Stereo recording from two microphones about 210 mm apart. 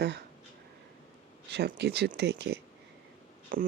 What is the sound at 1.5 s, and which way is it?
Speech, 50° right (ahead or behind).